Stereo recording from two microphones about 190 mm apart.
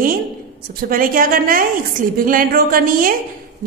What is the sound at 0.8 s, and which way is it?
A woman's voice, 50° right (ahead or behind).